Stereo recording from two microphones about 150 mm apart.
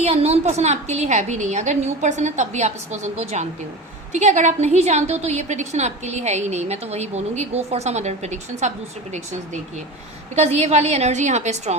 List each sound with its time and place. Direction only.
0.0 s a woman's voice: 45° right (ahead or behind)
10.3 s a woman's voice: 45° right (ahead or behind)